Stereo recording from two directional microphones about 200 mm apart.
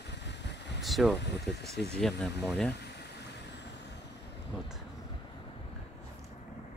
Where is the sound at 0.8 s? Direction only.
Centre (ahead or behind).